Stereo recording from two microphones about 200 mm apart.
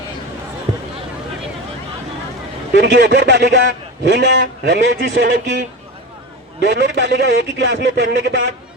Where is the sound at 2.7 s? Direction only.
55° right (ahead or behind).